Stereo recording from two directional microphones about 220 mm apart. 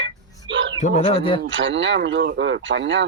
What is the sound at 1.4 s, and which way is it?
Speech, 60° right (ahead or behind).